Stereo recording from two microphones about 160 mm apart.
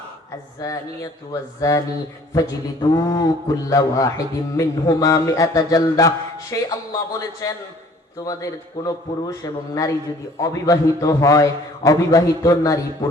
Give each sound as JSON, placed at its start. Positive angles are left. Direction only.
{"t": 0.6, "sound": "a man's voice", "side_deg": 20}
{"t": 2.9, "sound": "a man's voice", "side_deg": 20}